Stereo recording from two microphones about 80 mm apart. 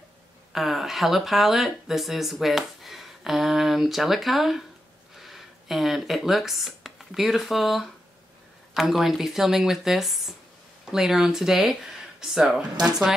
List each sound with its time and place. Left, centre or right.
0.5 s speech: centre